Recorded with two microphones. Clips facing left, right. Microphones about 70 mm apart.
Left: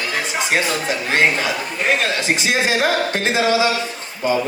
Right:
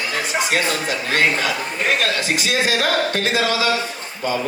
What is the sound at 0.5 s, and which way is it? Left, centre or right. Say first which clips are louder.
A man's voice: left 4 dB; left.